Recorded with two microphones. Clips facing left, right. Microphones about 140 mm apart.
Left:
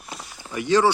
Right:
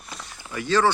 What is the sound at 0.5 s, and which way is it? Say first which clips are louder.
Speech: left 2 dB; 15° left (ahead or behind).